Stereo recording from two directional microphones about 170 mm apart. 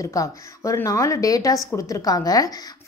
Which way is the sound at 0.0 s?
20° left (ahead or behind).